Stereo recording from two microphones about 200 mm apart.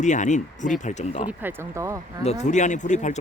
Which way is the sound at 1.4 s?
10° right (ahead or behind).